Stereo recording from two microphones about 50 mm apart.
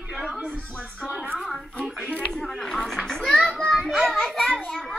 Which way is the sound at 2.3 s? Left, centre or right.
Centre.